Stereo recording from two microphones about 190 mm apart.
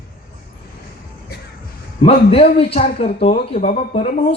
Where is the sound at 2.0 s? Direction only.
30° left (ahead or behind).